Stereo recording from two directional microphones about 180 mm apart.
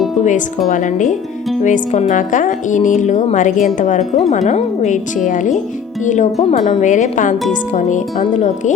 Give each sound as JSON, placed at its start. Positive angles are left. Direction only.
{"t": 0.2, "sound": "a woman's voice", "side_deg": 45}